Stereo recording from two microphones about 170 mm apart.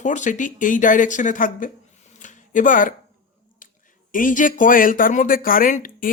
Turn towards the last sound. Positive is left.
turn(degrees=55)  # may be behind; listen again after turning